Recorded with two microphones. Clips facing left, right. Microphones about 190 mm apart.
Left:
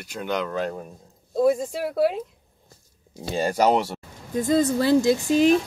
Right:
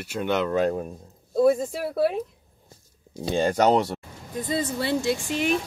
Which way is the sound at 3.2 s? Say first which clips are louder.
Right 1 dB; 5° left (ahead or behind).